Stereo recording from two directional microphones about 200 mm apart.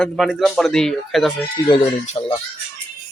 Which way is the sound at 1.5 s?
25° left (ahead or behind).